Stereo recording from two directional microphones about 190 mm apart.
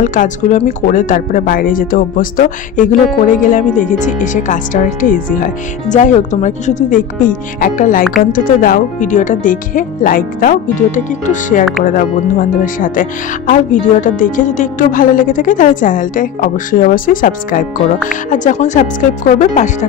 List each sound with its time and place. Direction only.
0.0 s speech: 45° left (ahead or behind)